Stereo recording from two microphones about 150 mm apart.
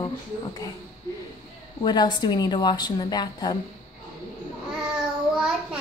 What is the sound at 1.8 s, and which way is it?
Speech, 30° left (ahead or behind).